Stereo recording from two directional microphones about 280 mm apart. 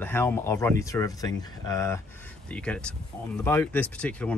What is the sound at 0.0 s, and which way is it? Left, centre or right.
Speech, centre.